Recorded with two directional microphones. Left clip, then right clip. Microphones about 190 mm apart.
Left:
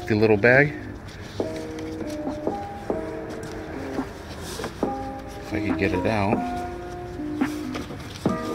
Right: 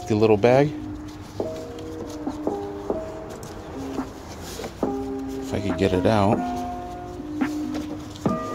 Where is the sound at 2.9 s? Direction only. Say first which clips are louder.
Even; 5° right (ahead or behind).